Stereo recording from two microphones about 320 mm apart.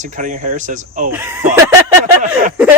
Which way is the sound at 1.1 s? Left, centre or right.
Centre.